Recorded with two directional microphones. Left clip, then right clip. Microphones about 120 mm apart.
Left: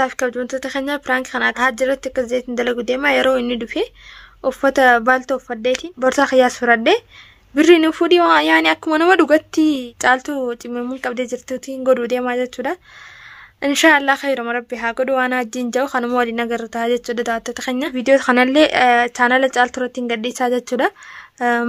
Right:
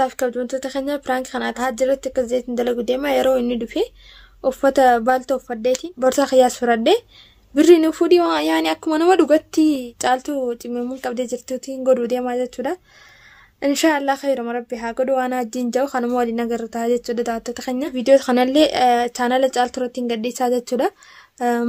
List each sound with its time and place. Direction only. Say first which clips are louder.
0.0 s speech: left 1 dB; 30° right (ahead or behind)